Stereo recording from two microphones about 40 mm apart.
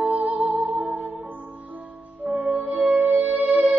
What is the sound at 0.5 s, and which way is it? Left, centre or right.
Music, right.